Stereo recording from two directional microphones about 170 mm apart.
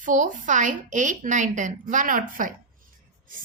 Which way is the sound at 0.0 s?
50° right (ahead or behind).